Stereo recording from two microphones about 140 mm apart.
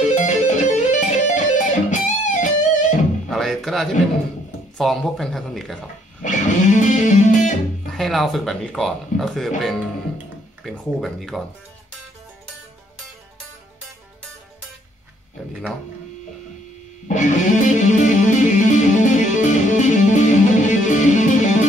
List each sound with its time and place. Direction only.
0.0 s music: 60° left (ahead or behind)
3.3 s music: centre (ahead or behind)
4.7 s speech: centre (ahead or behind)
6.2 s music: 60° left (ahead or behind)
7.8 s speech: centre (ahead or behind)
17.1 s music: 60° left (ahead or behind)